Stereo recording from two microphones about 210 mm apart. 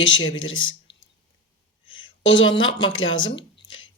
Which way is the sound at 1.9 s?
65° left (ahead or behind).